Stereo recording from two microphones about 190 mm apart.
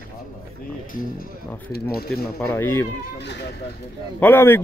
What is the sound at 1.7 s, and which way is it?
Speech, 55° left (ahead or behind).